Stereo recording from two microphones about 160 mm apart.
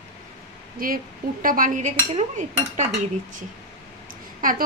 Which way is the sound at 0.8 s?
60° right (ahead or behind).